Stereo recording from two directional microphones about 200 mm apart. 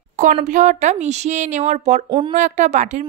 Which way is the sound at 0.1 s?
40° right (ahead or behind).